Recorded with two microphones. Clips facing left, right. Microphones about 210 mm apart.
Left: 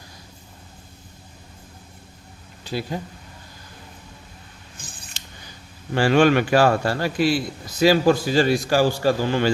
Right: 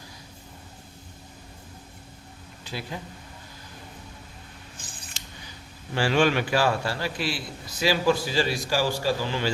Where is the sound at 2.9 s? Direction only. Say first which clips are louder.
Left 7 dB; 40° left (ahead or behind).